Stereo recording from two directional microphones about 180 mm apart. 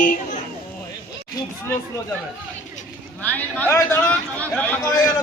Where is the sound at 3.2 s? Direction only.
10° left (ahead or behind).